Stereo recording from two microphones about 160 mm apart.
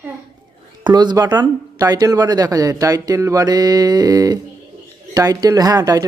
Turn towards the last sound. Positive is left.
turn(degrees=-20)  # may be behind; listen again after turning